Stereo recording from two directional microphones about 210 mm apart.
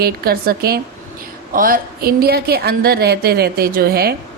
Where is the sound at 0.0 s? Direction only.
45° right (ahead or behind).